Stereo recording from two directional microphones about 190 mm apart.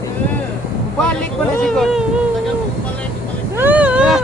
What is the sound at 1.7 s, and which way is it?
Speech, centre (ahead or behind).